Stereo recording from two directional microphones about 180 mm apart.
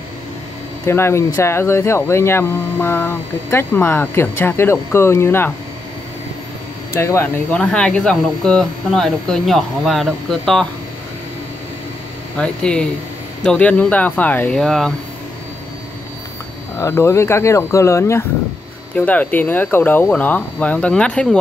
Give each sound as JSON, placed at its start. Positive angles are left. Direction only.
{"t": 0.8, "sound": "speech", "side_deg": 15}
{"t": 6.9, "sound": "speech", "side_deg": 15}
{"t": 12.4, "sound": "speech", "side_deg": 5}
{"t": 16.7, "sound": "speech", "side_deg": 15}